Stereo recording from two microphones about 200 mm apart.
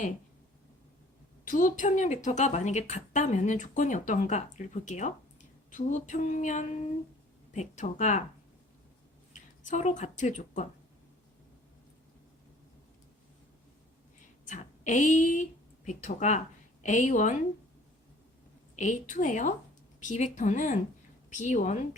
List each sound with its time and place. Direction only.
1.5 s speech: 40° left (ahead or behind)
9.6 s speech: 40° left (ahead or behind)
14.4 s a woman's voice: 35° left (ahead or behind)
18.8 s speech: 40° left (ahead or behind)